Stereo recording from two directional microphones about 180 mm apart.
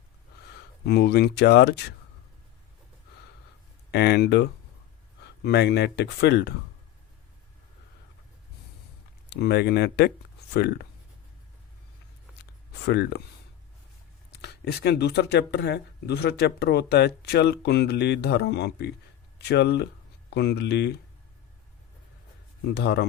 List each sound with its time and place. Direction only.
0.9 s speech: 65° left (ahead or behind)
3.9 s speech: 65° left (ahead or behind)
9.3 s speech: 65° left (ahead or behind)
12.9 s speech: 65° left (ahead or behind)
14.3 s speech: 65° left (ahead or behind)
22.7 s speech: 65° left (ahead or behind)